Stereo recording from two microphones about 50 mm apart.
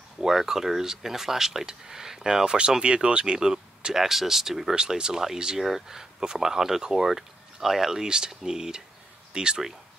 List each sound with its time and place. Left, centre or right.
0.2 s speech: centre